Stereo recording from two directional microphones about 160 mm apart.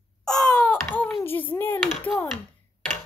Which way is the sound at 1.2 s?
10° left (ahead or behind).